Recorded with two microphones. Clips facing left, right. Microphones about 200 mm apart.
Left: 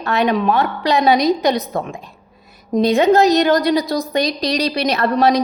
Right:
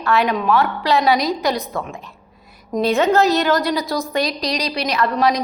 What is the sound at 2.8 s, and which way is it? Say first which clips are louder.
A woman's voice: left 3 dB; 15° left (ahead or behind).